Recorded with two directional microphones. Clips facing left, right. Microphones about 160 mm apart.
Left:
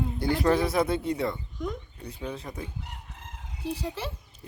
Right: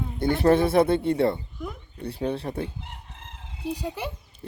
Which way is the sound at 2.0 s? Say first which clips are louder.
Right 8 dB; 30° right (ahead or behind).